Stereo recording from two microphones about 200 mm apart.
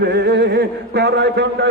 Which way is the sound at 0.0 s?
60° right (ahead or behind).